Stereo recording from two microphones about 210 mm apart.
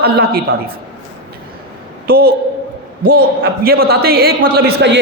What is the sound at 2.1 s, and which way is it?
Speech, 45° right (ahead or behind).